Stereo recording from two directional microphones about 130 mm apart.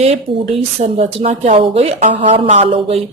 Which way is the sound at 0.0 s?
50° right (ahead or behind).